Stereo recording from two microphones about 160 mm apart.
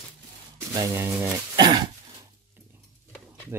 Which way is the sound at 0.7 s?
15° right (ahead or behind).